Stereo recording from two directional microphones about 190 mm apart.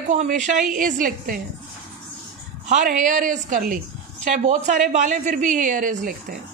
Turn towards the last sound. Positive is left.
turn(degrees=-45)  # may be behind; listen again after turning